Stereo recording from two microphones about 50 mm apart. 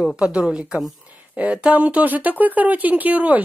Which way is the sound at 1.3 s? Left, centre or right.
Right.